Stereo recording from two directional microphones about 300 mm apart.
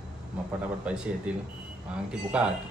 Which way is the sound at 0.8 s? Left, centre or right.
Centre.